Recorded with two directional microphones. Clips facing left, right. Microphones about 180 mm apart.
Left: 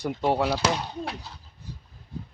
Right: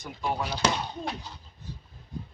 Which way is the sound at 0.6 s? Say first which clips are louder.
Left 1 dB; 10° left (ahead or behind).